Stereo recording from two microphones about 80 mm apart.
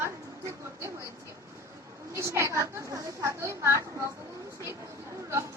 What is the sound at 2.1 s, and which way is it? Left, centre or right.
Speech, right.